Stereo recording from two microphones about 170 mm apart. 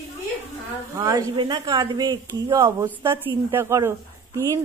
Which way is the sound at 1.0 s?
20° right (ahead or behind).